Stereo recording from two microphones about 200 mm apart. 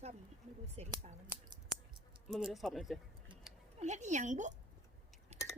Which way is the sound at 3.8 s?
35° right (ahead or behind).